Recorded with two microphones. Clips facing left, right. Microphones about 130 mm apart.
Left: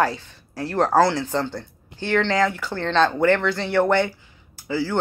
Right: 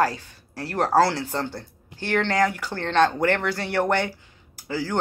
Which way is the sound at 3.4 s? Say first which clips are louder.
Left 4 dB; 10° right (ahead or behind).